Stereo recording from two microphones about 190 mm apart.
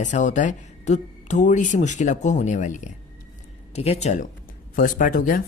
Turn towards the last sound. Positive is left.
turn(degrees=45)  # may be behind; listen again after turning